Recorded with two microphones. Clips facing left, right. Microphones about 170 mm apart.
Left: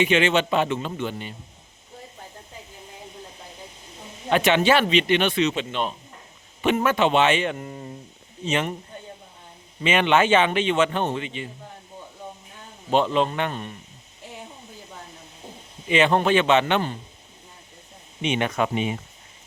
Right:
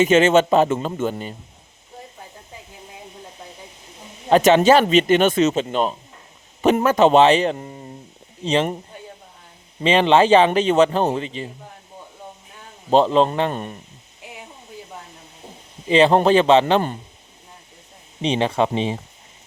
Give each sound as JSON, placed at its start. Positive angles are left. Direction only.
{"t": 0.0, "sound": "speech", "side_deg": -45}
{"t": 4.3, "sound": "speech", "side_deg": -40}
{"t": 9.8, "sound": "speech", "side_deg": -30}
{"t": 12.9, "sound": "speech", "side_deg": -35}
{"t": 13.5, "sound": "speech", "side_deg": -45}
{"t": 15.9, "sound": "speech", "side_deg": -35}
{"t": 18.2, "sound": "speech", "side_deg": -30}